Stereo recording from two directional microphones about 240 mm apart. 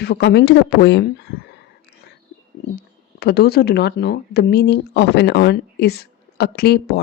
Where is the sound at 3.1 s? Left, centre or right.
Left.